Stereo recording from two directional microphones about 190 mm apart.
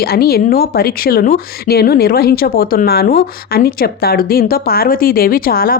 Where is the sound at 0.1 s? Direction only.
55° left (ahead or behind).